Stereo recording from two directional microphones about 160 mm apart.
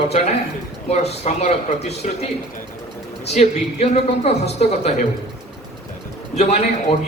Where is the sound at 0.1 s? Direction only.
45° left (ahead or behind).